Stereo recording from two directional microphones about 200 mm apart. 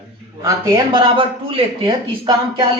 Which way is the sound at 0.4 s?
20° right (ahead or behind).